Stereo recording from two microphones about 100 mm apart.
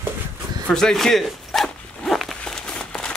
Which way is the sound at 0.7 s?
5° left (ahead or behind).